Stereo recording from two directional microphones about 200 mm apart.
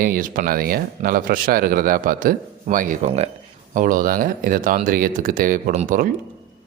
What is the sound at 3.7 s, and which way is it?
Speech, 45° right (ahead or behind).